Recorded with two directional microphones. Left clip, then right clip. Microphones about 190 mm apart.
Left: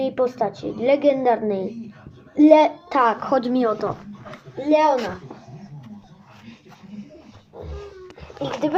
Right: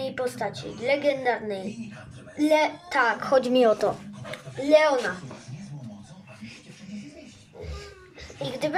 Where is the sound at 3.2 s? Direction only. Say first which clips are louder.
Left 1 dB; 5° left (ahead or behind).